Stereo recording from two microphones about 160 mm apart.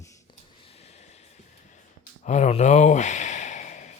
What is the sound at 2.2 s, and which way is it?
Sigh, 45° left (ahead or behind).